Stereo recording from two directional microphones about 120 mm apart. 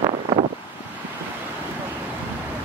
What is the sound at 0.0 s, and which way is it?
Wind, 55° right (ahead or behind).